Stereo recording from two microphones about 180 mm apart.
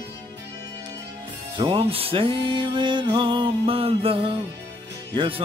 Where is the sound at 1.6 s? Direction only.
30° right (ahead or behind).